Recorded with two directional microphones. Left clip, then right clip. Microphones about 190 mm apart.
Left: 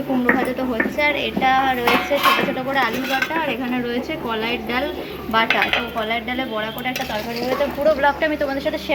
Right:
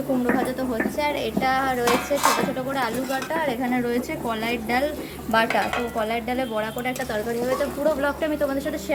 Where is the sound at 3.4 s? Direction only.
15° right (ahead or behind).